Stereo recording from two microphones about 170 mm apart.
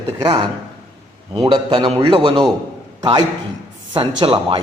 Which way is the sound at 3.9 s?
30° right (ahead or behind).